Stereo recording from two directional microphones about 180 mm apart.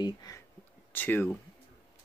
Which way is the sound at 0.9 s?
10° left (ahead or behind).